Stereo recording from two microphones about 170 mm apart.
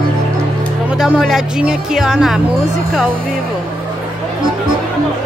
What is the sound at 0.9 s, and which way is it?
Speech, 5° right (ahead or behind).